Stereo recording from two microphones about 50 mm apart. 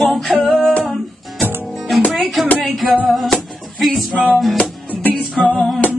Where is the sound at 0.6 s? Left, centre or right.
Left.